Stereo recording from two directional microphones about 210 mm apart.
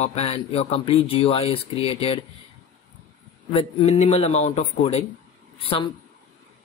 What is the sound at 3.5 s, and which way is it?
A man's voice, 30° left (ahead or behind).